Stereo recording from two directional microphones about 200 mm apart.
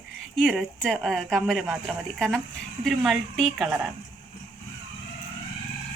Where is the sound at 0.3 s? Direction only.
Centre (ahead or behind).